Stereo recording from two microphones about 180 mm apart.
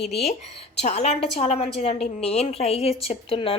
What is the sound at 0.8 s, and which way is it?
A woman's voice, 35° left (ahead or behind).